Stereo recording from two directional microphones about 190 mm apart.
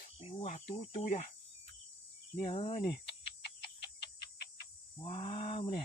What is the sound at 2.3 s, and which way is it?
Speech, 35° left (ahead or behind).